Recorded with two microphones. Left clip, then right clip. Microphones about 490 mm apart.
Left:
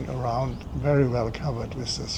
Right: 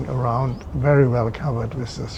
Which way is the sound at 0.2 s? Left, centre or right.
Right.